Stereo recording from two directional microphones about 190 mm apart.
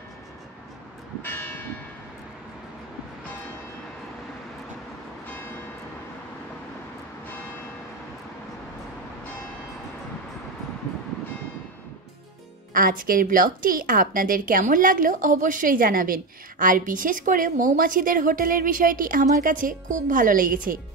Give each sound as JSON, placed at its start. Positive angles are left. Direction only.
{"t": 1.2, "sound": "church bell", "side_deg": 10}
{"t": 12.7, "sound": "a woman's voice", "side_deg": -50}